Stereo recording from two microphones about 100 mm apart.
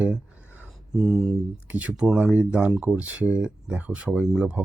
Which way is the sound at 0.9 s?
5° right (ahead or behind).